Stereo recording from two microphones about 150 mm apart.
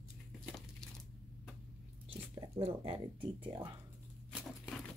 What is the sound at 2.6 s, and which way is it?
Speech, 40° right (ahead or behind).